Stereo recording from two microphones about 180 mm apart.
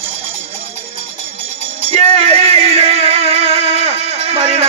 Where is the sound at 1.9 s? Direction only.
35° right (ahead or behind).